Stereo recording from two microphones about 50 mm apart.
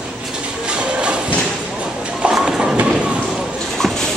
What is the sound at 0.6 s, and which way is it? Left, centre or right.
Train, right.